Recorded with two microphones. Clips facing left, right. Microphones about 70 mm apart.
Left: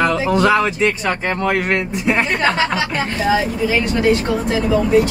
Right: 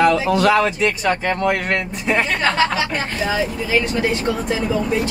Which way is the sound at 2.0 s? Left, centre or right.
Centre.